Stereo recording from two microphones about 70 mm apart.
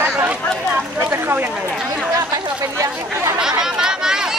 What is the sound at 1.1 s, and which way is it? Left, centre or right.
Speech, right.